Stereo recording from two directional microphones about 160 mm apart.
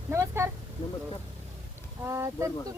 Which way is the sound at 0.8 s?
30° left (ahead or behind).